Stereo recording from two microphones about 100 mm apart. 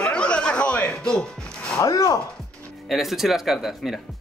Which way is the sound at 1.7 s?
35° left (ahead or behind).